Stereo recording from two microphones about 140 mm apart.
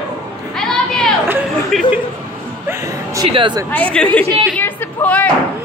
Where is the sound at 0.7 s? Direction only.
5° left (ahead or behind).